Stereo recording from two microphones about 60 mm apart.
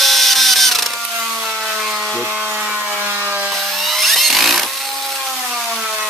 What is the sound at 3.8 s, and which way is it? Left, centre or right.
Wood, centre.